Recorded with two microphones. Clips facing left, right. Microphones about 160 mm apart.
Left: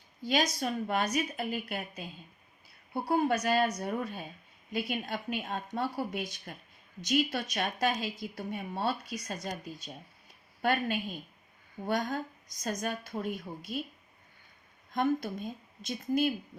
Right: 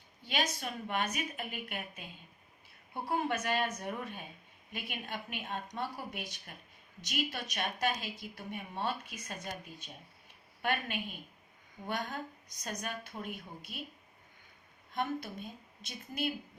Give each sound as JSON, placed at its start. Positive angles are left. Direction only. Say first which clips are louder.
{"t": 0.2, "sound": "a woman's voice", "louder": "left 6 dB", "side_deg": 40}
{"t": 14.9, "sound": "a woman's voice", "louder": "left 7 dB", "side_deg": 40}